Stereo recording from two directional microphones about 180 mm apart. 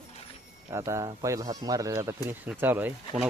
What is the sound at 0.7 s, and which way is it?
Speech, 15° right (ahead or behind).